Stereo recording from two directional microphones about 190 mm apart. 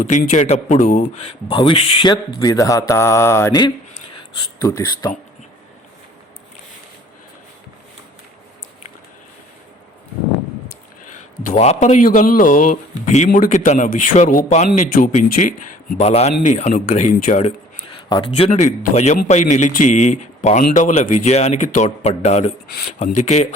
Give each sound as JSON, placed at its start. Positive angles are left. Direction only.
{"t": 0.0, "sound": "speech", "side_deg": 40}
{"t": 11.1, "sound": "a man's voice", "side_deg": 35}
{"t": 18.1, "sound": "a man's voice", "side_deg": 25}